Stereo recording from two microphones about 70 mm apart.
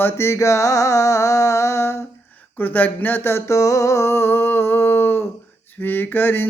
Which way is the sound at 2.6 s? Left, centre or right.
Left.